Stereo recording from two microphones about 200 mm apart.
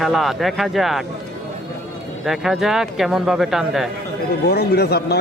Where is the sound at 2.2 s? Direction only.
Centre (ahead or behind).